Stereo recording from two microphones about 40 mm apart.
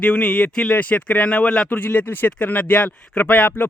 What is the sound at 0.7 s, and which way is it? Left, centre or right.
Speech, left.